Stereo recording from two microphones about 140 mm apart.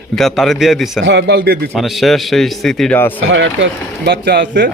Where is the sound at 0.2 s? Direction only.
Centre (ahead or behind).